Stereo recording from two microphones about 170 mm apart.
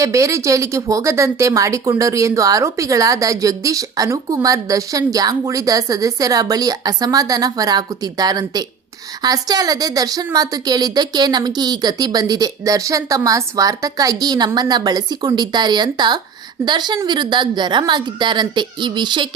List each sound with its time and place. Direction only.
0.0 s a woman's voice: 20° right (ahead or behind)